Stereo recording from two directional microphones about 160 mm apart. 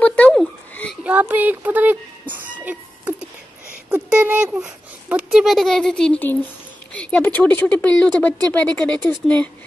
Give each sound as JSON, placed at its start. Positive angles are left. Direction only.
{"t": 0.0, "sound": "frog", "side_deg": 10}
{"t": 1.0, "sound": "a sound", "side_deg": -10}
{"t": 6.9, "sound": "speech", "side_deg": 10}